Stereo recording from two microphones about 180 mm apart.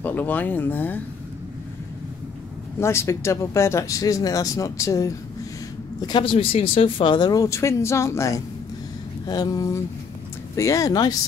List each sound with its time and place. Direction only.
0.0 s speech: 10° left (ahead or behind)
2.8 s speech: 15° left (ahead or behind)